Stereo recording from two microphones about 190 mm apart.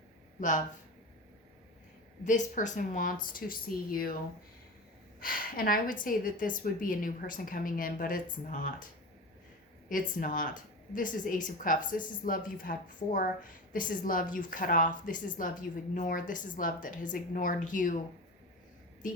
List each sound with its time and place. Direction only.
0.3 s speech: 40° left (ahead or behind)
2.2 s speech: 40° left (ahead or behind)
5.2 s speech: 50° left (ahead or behind)
9.9 s speech: 45° left (ahead or behind)